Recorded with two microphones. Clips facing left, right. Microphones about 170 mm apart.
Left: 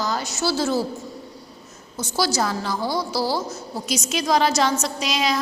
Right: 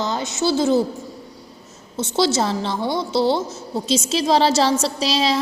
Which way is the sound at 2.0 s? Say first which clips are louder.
Right 4 dB; 25° right (ahead or behind).